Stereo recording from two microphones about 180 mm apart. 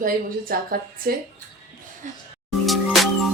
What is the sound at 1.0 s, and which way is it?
Speech, 55° right (ahead or behind).